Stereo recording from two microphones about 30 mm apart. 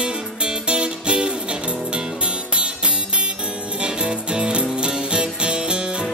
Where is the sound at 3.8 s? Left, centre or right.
Right.